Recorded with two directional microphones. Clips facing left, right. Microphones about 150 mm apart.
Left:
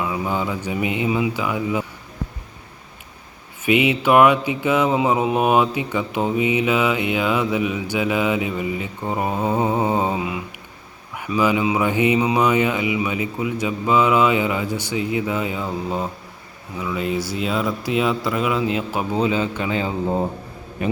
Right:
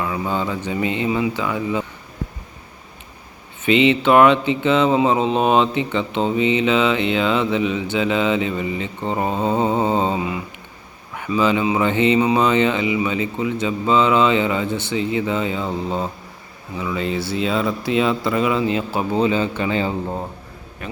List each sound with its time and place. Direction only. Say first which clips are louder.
0.0 s speech: right 1 dB; 5° left (ahead or behind)
3.6 s a man's voice: right 3 dB; 10° left (ahead or behind)
20.8 s speech: left 10 dB; 15° left (ahead or behind)